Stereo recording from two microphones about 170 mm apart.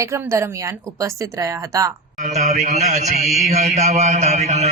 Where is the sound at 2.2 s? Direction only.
45° right (ahead or behind).